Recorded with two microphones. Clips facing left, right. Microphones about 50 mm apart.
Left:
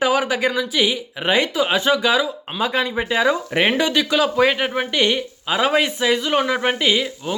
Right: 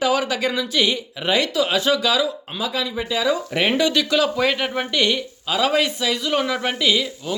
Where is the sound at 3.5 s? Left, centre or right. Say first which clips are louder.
Left 1 dB; left.